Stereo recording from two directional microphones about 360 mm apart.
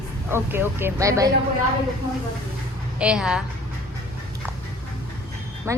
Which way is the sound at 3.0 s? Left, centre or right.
Centre.